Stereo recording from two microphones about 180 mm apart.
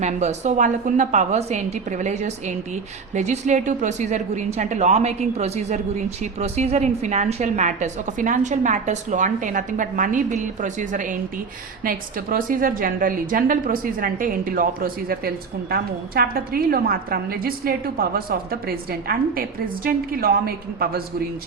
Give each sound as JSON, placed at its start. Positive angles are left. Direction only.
{"t": 0.0, "sound": "a woman's voice", "side_deg": -40}